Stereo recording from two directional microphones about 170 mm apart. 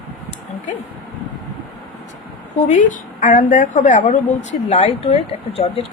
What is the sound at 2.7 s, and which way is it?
A woman's voice, 50° left (ahead or behind).